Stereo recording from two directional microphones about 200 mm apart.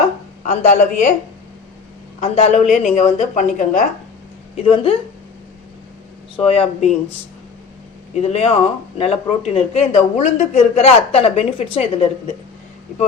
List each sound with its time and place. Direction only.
0.4 s a man's voice: 35° left (ahead or behind)
2.2 s a man's voice: 35° left (ahead or behind)
4.5 s speech: 25° left (ahead or behind)
6.4 s speech: 30° left (ahead or behind)
8.1 s a man's voice: 30° left (ahead or behind)